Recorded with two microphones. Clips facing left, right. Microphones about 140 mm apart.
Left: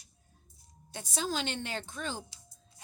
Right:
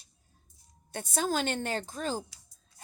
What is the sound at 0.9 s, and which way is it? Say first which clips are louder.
A woman's voice: right 4 dB; 50° right (ahead or behind).